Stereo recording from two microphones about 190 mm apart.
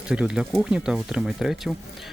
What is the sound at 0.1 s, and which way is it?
Speech, 5° right (ahead or behind).